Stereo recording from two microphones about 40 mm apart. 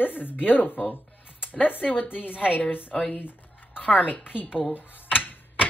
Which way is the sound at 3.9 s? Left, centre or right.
Left.